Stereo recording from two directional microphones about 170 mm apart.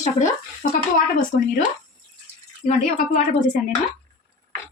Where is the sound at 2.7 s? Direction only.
45° left (ahead or behind).